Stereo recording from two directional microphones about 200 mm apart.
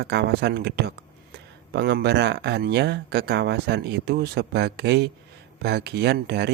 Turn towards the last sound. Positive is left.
turn(degrees=-55)  # may be behind; listen again after turning